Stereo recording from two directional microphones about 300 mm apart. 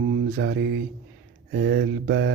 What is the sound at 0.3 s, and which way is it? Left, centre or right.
Speech, right.